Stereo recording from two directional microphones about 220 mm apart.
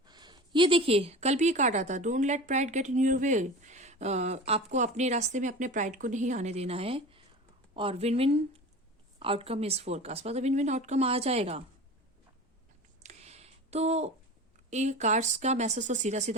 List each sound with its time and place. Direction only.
0.0 s a woman's voice: 20° right (ahead or behind)
13.0 s a sound: 30° right (ahead or behind)
14.7 s a woman's voice: 30° right (ahead or behind)